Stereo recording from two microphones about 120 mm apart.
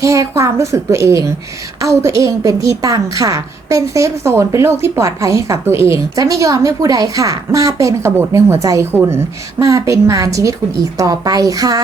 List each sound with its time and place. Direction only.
0.0 s a woman's voice: 25° right (ahead or behind)